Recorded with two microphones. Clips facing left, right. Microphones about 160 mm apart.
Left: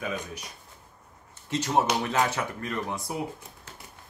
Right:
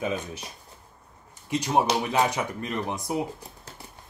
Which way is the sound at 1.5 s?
15° right (ahead or behind).